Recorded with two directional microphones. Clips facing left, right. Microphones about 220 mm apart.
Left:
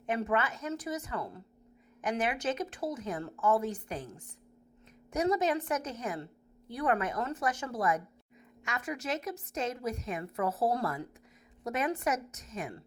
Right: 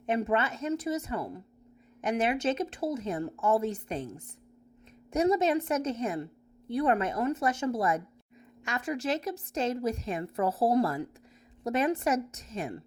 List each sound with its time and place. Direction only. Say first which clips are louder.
0.0 s a woman's voice: right 3 dB; 25° right (ahead or behind)
5.1 s a woman's voice: right 4 dB; 25° right (ahead or behind)